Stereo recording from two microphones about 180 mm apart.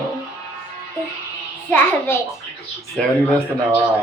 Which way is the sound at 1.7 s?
10° left (ahead or behind).